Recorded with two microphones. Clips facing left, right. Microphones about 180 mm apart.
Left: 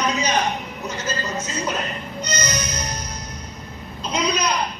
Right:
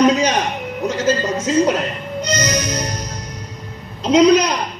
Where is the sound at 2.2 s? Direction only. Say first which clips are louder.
Right 7 dB; 90° right.